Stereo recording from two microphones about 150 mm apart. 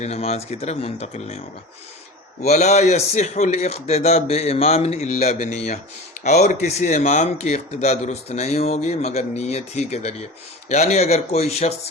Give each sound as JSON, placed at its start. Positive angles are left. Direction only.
{"t": 0.0, "sound": "speech", "side_deg": 45}
{"t": 2.5, "sound": "speech", "side_deg": 50}